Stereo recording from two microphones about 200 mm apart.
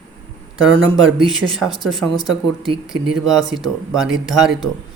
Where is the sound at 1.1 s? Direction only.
Centre (ahead or behind).